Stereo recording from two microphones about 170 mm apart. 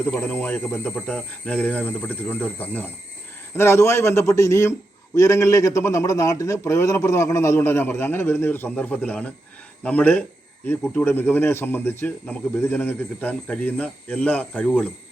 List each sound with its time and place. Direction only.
0.0 s a man's voice: 10° left (ahead or behind)